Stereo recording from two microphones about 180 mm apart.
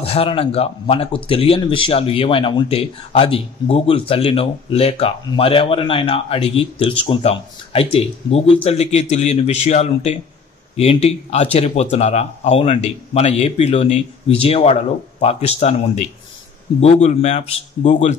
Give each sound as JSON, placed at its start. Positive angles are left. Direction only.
{"t": 0.0, "sound": "speech", "side_deg": 30}